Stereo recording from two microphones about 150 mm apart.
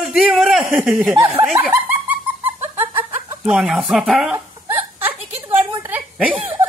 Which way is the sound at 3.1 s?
10° right (ahead or behind).